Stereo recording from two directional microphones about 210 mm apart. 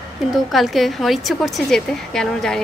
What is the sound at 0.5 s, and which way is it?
A woman's voice, centre (ahead or behind).